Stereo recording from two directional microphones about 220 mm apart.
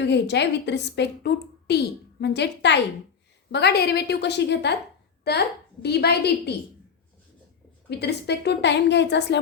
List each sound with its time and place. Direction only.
0.0 s a woman's voice: 50° left (ahead or behind)
7.9 s a woman's voice: 50° left (ahead or behind)